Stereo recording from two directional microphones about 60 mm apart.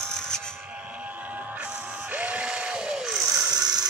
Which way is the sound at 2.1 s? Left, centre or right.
Right.